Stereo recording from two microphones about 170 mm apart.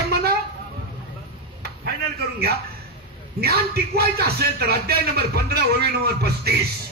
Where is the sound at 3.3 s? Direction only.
65° right (ahead or behind).